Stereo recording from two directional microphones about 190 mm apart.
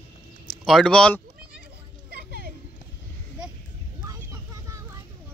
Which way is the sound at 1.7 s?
55° right (ahead or behind).